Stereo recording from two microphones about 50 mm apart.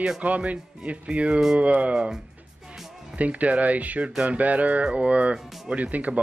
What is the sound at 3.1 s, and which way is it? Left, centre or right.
Speech, right.